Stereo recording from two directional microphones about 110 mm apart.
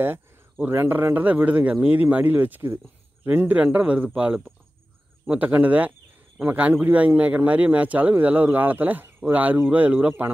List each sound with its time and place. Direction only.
0.0 s speech: 20° right (ahead or behind)